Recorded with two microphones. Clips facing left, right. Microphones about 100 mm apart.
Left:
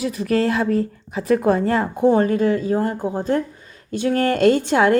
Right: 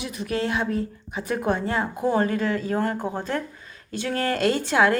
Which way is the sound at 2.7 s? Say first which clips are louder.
Left 4 dB; 25° left (ahead or behind).